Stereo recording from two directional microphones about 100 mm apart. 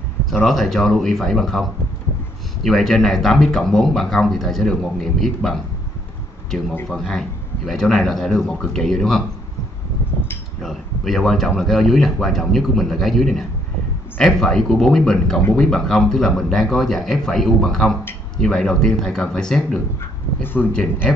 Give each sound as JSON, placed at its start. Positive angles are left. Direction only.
{"t": 0.5, "sound": "speech", "side_deg": 0}
{"t": 6.9, "sound": "speech", "side_deg": 0}
{"t": 10.6, "sound": "speech", "side_deg": 0}
{"t": 20.0, "sound": "speech", "side_deg": 20}